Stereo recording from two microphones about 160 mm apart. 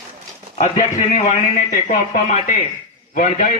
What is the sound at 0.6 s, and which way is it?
A man's voice, 45° left (ahead or behind).